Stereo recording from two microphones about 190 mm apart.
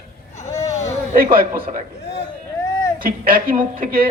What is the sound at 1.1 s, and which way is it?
Speech, 50° right (ahead or behind).